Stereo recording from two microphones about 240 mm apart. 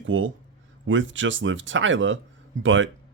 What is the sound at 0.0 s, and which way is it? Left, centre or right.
Speech, right.